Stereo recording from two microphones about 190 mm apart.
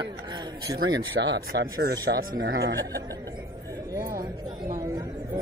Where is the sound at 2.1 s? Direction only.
65° right (ahead or behind).